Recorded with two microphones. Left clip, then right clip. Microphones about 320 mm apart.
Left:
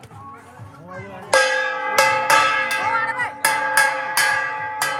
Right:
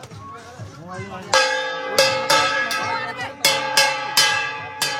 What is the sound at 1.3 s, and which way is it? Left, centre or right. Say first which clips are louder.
Speech: left 1 dB; left.